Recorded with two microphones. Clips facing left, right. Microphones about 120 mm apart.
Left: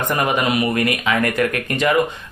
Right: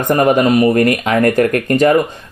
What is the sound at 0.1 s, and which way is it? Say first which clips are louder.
Speech: right 10 dB; 45° right (ahead or behind).